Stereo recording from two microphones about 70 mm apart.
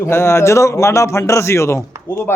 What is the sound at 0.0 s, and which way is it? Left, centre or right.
Speech, left.